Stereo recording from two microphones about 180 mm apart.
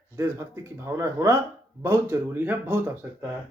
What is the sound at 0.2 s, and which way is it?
Speech, 15° right (ahead or behind).